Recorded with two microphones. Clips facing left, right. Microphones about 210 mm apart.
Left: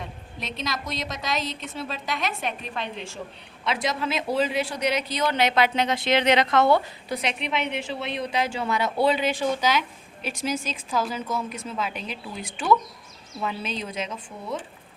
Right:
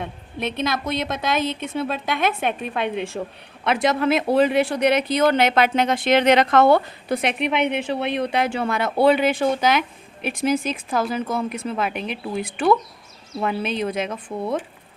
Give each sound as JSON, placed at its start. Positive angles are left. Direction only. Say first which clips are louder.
{"t": 0.0, "sound": "speech", "louder": "right 9 dB", "side_deg": -60}